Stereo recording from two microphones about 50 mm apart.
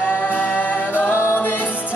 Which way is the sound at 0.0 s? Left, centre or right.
Left.